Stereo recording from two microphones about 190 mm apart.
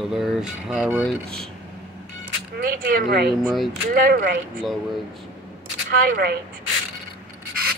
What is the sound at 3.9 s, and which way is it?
Speech, 50° right (ahead or behind).